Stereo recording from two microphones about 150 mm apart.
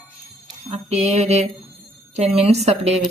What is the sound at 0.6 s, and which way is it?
Speech, 50° right (ahead or behind).